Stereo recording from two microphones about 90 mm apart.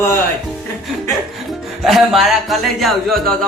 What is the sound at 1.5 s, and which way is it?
Music, 5° right (ahead or behind).